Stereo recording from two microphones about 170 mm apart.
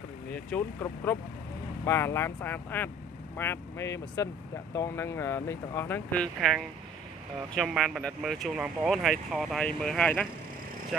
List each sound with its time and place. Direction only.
0.3 s speech: 10° left (ahead or behind)